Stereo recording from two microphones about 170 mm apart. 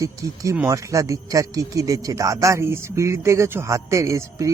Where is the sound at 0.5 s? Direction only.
15° right (ahead or behind).